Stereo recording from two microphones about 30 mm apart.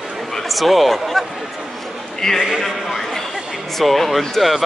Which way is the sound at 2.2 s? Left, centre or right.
Centre.